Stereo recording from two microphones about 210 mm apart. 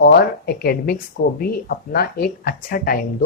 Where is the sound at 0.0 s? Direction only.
50° left (ahead or behind).